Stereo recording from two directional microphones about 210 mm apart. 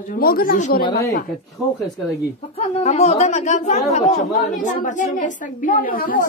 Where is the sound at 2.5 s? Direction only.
30° left (ahead or behind).